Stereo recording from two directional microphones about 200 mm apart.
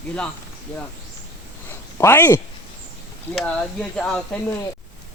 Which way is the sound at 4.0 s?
5° left (ahead or behind).